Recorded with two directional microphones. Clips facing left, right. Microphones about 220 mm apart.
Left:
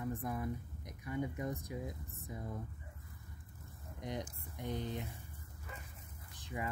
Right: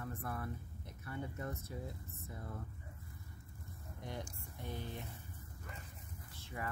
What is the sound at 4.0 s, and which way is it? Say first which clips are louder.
Speech: left 4 dB; 20° left (ahead or behind).